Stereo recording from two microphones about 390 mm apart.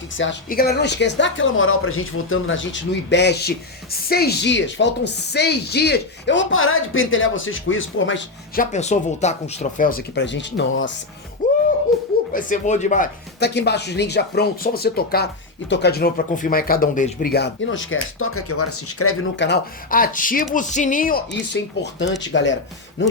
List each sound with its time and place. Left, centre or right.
0.2 s speech: left
8.7 s speech: centre
11.4 s a sound: centre
12.3 s speech: centre